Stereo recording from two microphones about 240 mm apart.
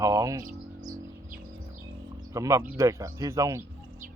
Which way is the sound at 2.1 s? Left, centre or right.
Centre.